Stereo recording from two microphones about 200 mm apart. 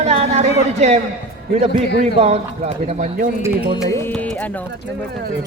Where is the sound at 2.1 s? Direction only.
30° right (ahead or behind).